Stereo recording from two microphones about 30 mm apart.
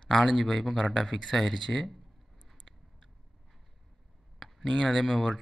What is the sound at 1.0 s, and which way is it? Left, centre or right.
Speech, centre.